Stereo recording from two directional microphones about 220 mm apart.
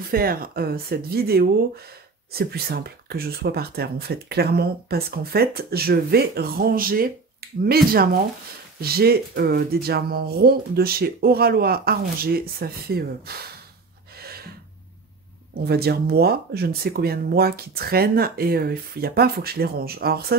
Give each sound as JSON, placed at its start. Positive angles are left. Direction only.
{"t": 0.1, "sound": "speech", "side_deg": -40}
{"t": 15.6, "sound": "speech", "side_deg": -45}